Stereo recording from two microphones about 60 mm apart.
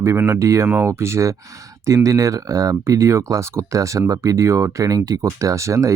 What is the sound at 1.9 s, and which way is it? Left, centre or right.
Speech, right.